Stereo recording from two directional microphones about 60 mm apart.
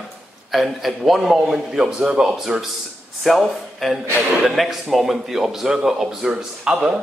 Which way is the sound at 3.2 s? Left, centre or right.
Centre.